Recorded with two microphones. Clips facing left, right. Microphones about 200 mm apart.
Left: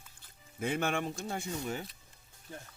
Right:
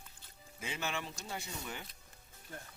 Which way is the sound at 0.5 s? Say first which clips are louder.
Left 8 dB; 55° left (ahead or behind).